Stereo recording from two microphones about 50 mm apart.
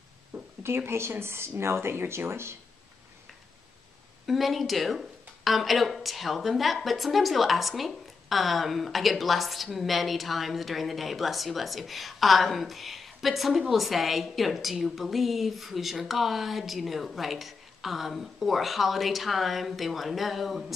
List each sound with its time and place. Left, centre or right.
0.6 s speech: right
4.3 s a woman's voice: centre